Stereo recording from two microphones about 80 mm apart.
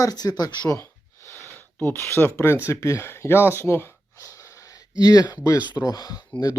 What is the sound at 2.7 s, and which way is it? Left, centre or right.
Speech, left.